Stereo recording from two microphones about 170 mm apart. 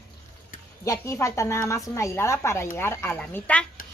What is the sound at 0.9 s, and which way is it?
Speech, 15° left (ahead or behind).